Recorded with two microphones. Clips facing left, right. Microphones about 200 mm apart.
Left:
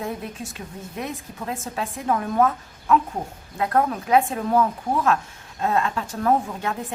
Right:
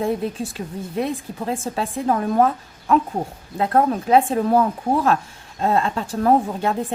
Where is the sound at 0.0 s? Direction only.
30° right (ahead or behind).